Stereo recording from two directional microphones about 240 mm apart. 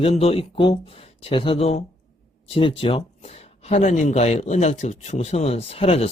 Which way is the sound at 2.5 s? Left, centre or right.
Left.